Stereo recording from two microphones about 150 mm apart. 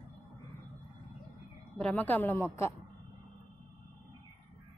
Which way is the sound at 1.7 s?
10° left (ahead or behind).